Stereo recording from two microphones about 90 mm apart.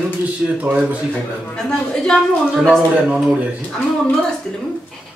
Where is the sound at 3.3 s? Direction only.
15° right (ahead or behind).